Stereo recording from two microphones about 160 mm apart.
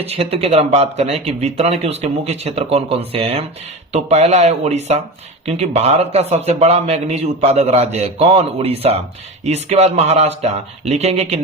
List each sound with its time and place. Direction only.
0.0 s a man's voice: 40° right (ahead or behind)